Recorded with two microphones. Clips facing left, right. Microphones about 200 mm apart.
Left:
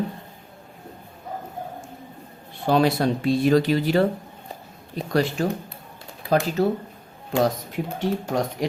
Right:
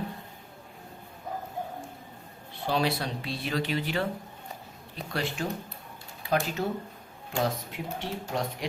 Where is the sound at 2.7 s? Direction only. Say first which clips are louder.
Left 9 dB; 50° left (ahead or behind).